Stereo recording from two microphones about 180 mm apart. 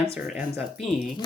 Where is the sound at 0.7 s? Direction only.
Centre (ahead or behind).